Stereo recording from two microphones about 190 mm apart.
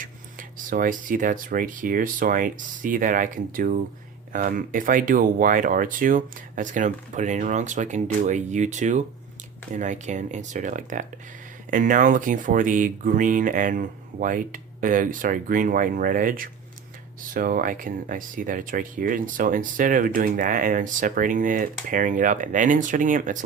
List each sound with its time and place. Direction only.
0.7 s speech: 45° right (ahead or behind)